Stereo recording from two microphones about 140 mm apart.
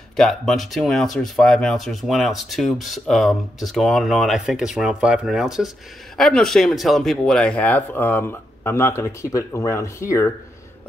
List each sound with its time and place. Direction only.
0.1 s speech: centre (ahead or behind); by 10.3 s 20° left (ahead or behind)